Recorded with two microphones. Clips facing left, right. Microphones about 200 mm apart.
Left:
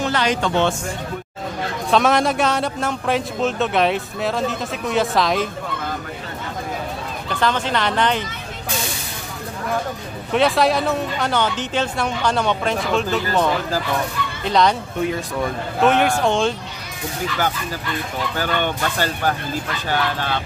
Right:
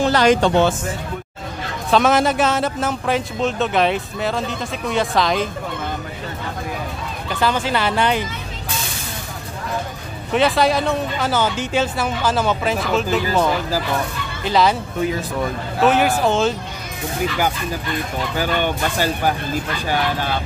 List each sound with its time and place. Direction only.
0.0 s a sound: 40° right (ahead or behind)
0.6 s speech: 5° right (ahead or behind)
7.3 s speech: 5° right (ahead or behind)
10.3 s speech: centre (ahead or behind)
18.3 s speech: 10° right (ahead or behind)